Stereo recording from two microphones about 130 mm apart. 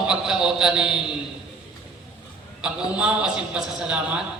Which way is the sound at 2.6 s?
5° right (ahead or behind).